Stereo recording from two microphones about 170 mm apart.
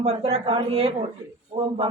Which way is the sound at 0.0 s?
40° right (ahead or behind).